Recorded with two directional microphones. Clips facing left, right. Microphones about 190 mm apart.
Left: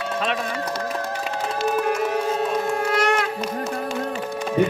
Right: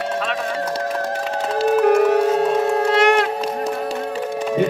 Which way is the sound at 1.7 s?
60° right (ahead or behind).